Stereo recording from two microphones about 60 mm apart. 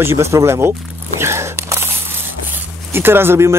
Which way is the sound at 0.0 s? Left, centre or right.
Right.